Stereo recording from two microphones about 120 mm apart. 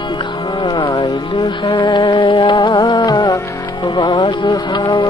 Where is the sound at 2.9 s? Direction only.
30° left (ahead or behind).